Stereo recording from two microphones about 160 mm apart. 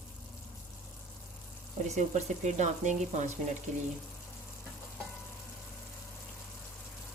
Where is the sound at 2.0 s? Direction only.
50° right (ahead or behind).